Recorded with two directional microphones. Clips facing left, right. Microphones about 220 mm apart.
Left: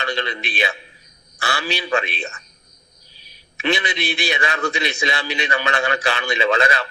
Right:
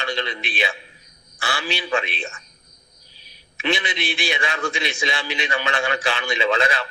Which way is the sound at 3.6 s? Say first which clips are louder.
Left 2 dB; 40° left (ahead or behind).